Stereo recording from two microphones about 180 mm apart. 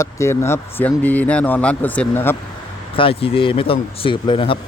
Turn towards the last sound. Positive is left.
turn(degrees=30)  # may be behind; listen again after turning